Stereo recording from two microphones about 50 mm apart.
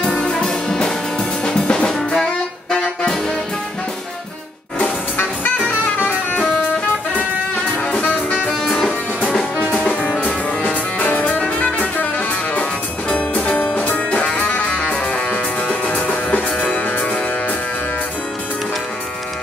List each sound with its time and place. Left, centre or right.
0.0 s music: centre
1.9 s music: centre
4.7 s music: left
7.7 s music: left
9.6 s music: right
9.8 s music: left